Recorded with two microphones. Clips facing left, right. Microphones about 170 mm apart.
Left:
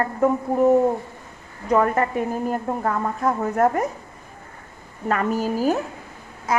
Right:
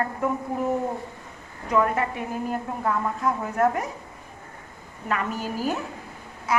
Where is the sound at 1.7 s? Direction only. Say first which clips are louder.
Left 4 dB; 45° left (ahead or behind).